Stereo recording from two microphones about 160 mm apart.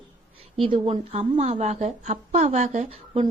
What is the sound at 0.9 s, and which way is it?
A woman's voice, 40° right (ahead or behind).